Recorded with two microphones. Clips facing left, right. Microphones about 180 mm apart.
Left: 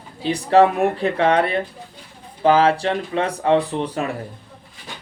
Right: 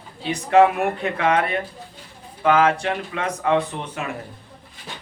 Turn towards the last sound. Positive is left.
turn(degrees=35)  # may be behind; listen again after turning